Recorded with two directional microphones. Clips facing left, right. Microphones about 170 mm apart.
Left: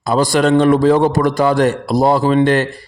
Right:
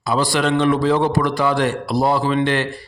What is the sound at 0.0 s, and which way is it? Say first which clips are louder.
A man's voice: left 5 dB; 45° left (ahead or behind).